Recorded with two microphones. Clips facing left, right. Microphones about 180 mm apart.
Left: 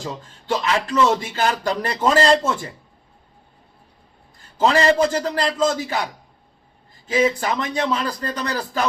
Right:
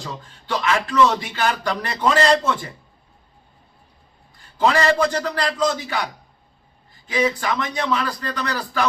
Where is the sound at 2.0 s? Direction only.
40° left (ahead or behind).